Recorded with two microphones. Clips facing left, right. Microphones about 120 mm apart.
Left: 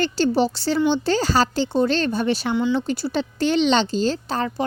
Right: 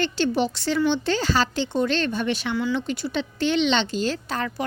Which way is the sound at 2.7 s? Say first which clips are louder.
Left 3 dB; 35° left (ahead or behind).